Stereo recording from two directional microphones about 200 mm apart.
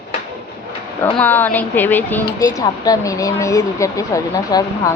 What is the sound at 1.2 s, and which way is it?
Speech, 10° left (ahead or behind).